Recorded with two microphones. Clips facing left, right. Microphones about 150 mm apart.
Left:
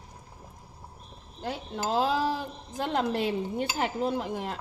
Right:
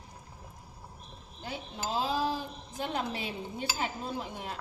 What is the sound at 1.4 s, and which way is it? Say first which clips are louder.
A woman's voice: left 6 dB; 65° left (ahead or behind).